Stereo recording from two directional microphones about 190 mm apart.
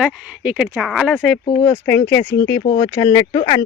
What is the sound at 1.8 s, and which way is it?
Speech, 15° left (ahead or behind).